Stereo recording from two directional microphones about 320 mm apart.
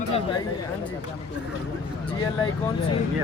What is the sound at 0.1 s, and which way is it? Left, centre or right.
Speech, centre.